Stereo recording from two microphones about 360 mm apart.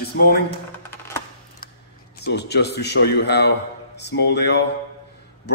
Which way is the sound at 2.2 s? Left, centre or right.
Left.